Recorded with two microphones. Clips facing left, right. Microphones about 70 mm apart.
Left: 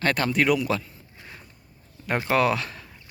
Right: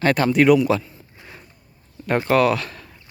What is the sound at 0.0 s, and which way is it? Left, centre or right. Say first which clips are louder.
Speech: right 6 dB; centre.